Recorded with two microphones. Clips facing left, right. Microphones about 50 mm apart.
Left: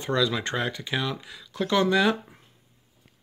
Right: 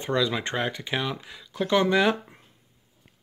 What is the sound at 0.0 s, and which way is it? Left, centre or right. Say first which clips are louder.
Speech: even; right.